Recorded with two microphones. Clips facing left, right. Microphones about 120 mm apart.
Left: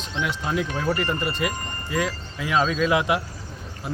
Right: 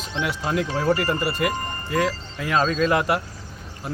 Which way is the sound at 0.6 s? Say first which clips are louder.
Right 3 dB; 35° right (ahead or behind).